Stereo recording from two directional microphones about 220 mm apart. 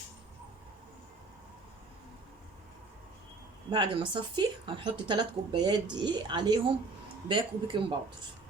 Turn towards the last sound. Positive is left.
turn(degrees=-25)  # may be behind; listen again after turning